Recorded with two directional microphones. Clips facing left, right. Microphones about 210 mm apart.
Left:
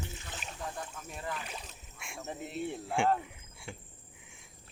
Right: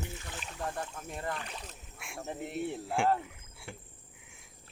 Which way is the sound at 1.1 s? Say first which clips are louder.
Right 2 dB; 55° right (ahead or behind).